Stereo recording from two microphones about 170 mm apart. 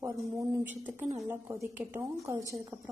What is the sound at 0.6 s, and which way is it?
A woman's voice, 10° right (ahead or behind).